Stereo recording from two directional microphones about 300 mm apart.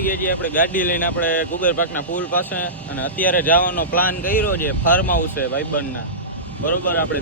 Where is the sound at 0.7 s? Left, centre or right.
Left.